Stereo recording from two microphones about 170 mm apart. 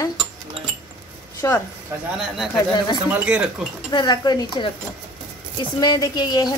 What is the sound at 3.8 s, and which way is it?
Speech, 25° left (ahead or behind).